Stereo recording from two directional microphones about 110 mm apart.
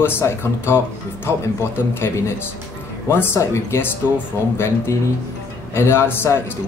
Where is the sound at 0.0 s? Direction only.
20° left (ahead or behind).